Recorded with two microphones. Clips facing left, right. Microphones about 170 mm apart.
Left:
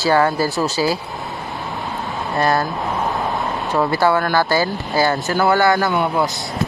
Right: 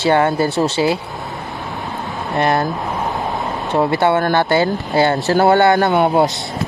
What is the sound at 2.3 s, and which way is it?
Speech, 20° right (ahead or behind).